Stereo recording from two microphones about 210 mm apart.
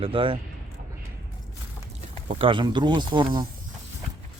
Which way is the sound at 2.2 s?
25° right (ahead or behind).